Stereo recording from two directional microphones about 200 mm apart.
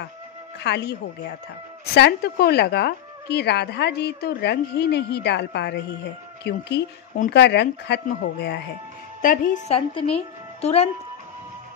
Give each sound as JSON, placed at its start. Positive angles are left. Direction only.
{"t": 0.6, "sound": "a woman's voice", "side_deg": 55}
{"t": 2.0, "sound": "a woman's voice", "side_deg": 55}
{"t": 9.2, "sound": "a woman's voice", "side_deg": 45}
{"t": 9.7, "sound": "a woman's voice", "side_deg": 25}